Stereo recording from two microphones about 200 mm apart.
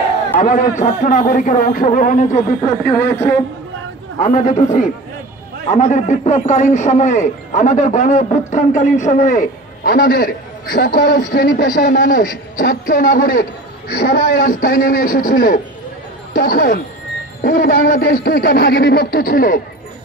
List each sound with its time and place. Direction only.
0.4 s a man's voice: 40° left (ahead or behind)
3.2 s speech: 10° left (ahead or behind)
4.2 s a man's voice: 40° left (ahead or behind); by 14.3 s 55° left (ahead or behind)
14.4 s speech: 45° left (ahead or behind)